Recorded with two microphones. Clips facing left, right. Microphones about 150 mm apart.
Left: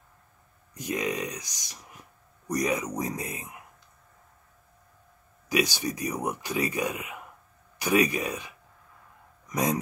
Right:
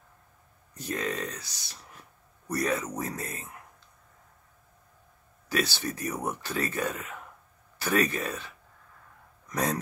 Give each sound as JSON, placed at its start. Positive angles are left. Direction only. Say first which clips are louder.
{"t": 0.7, "sound": "speech", "louder": "left 2 dB", "side_deg": 15}
{"t": 5.5, "sound": "speech", "louder": "left 3 dB", "side_deg": 15}